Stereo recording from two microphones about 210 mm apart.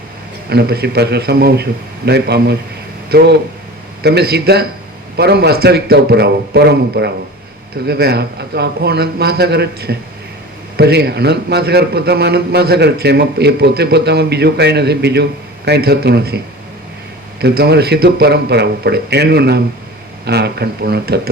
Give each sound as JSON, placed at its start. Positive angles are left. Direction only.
{"t": 0.5, "sound": "a man's voice", "side_deg": -50}
{"t": 17.4, "sound": "a man's voice", "side_deg": -50}